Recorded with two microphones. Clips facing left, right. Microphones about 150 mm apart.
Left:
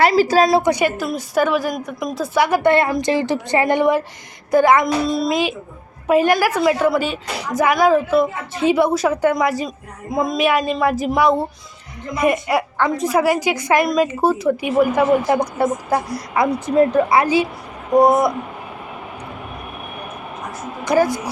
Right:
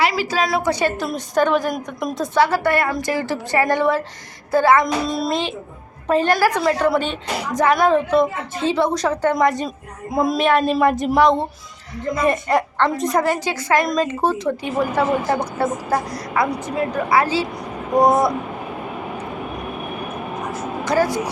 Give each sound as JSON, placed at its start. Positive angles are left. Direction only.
{"t": 0.0, "sound": "a woman's voice", "side_deg": 45}
{"t": 0.4, "sound": "speech", "side_deg": 20}
{"t": 5.0, "sound": "a woman's voice", "side_deg": 0}
{"t": 6.1, "sound": "a woman's voice", "side_deg": 10}
{"t": 10.4, "sound": "a woman's voice", "side_deg": 10}
{"t": 20.8, "sound": "speech", "side_deg": 15}